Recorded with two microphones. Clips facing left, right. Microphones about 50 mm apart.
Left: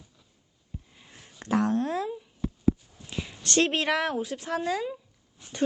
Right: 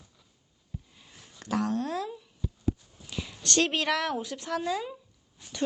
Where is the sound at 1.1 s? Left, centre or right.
Left.